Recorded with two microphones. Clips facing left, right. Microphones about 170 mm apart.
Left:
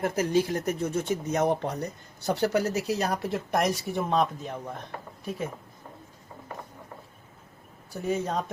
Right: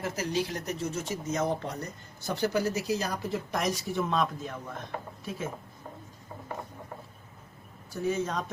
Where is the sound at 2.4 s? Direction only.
70° left (ahead or behind).